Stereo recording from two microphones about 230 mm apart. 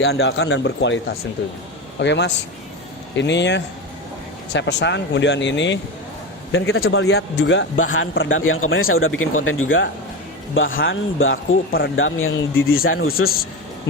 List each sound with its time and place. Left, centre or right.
0.1 s speech: left
6.5 s speech: left
7.2 s speech: left
13.1 s a man's voice: left